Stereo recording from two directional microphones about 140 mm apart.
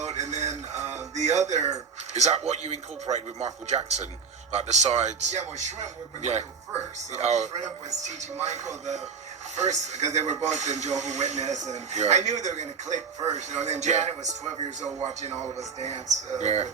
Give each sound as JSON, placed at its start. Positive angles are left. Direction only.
{"t": 0.0, "sound": "music", "side_deg": -55}
{"t": 1.1, "sound": "speech", "side_deg": -55}